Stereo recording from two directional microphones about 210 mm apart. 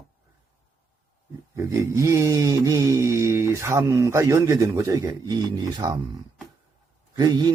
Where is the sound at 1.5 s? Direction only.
15° right (ahead or behind).